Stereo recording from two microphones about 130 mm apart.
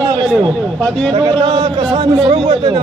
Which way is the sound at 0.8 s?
5° left (ahead or behind).